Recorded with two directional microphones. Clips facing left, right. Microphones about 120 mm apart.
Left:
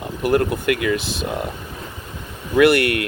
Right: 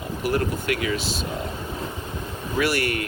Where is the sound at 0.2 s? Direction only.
55° left (ahead or behind).